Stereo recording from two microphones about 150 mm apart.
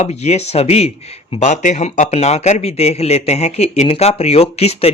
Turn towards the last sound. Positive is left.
turn(degrees=45)  # may be behind; listen again after turning